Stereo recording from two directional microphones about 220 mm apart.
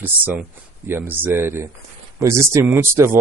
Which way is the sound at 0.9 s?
10° right (ahead or behind).